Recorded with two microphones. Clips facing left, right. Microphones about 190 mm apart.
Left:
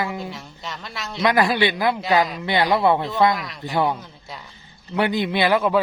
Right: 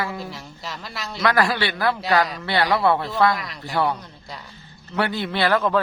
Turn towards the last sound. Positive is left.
turn(degrees=10)  # may be behind; listen again after turning